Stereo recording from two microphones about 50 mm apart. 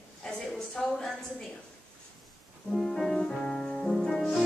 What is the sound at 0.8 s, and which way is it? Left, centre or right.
Speech, centre.